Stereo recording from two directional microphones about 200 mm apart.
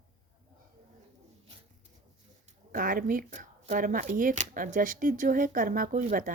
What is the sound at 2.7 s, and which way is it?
Speech, 45° right (ahead or behind).